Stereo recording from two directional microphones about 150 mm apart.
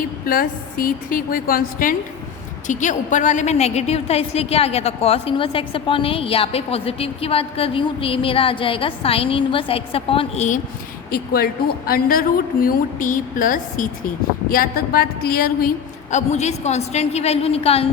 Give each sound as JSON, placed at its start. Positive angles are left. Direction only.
{"t": 0.3, "sound": "a woman's voice", "side_deg": 70}
{"t": 2.6, "sound": "a woman's voice", "side_deg": 55}
{"t": 11.1, "sound": "a woman's voice", "side_deg": 80}
{"t": 14.5, "sound": "a woman's voice", "side_deg": 80}
{"t": 16.1, "sound": "a woman's voice", "side_deg": 50}